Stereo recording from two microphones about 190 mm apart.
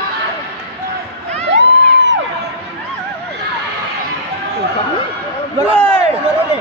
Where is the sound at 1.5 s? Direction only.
70° right (ahead or behind).